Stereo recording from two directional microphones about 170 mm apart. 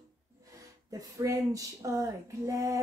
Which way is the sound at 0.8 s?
20° right (ahead or behind).